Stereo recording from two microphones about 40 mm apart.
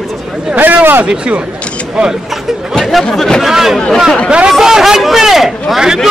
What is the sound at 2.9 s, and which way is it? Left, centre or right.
A man's voice, centre.